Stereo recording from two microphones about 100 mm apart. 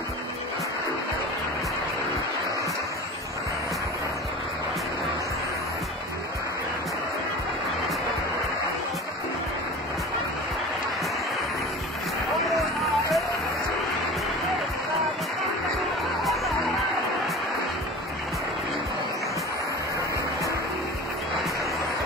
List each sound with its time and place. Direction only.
12.3 s music: centre (ahead or behind)
16.3 s music: centre (ahead or behind)